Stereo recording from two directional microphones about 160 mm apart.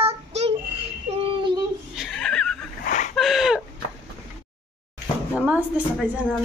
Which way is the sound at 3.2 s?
Centre (ahead or behind).